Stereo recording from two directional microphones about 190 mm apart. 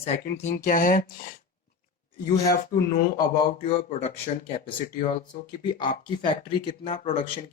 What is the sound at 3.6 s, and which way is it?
Speech, 35° left (ahead or behind).